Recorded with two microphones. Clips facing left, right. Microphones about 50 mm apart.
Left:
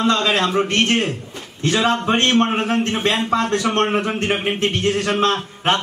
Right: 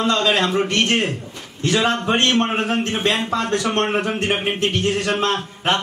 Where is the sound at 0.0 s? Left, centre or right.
Left.